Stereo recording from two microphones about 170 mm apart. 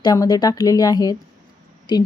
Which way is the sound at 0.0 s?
20° left (ahead or behind).